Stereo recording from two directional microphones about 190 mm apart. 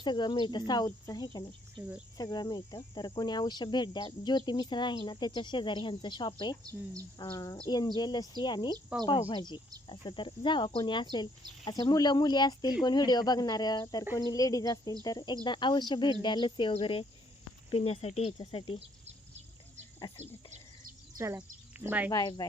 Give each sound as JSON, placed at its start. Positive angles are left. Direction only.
{"t": 0.0, "sound": "speech", "side_deg": 25}
{"t": 1.8, "sound": "speech", "side_deg": -20}
{"t": 2.1, "sound": "speech", "side_deg": 20}
{"t": 6.7, "sound": "speech", "side_deg": -20}
{"t": 7.2, "sound": "speech", "side_deg": 20}
{"t": 8.9, "sound": "speech", "side_deg": -5}
{"t": 9.3, "sound": "speech", "side_deg": 25}
{"t": 21.2, "sound": "speech", "side_deg": -15}
{"t": 22.1, "sound": "speech", "side_deg": 20}